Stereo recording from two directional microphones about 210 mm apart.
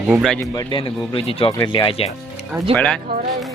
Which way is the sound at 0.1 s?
Centre (ahead or behind).